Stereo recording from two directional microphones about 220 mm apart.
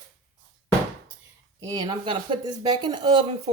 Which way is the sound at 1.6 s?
15° right (ahead or behind).